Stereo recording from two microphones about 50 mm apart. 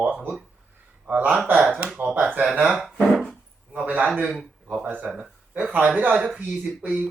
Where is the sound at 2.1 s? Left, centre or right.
Right.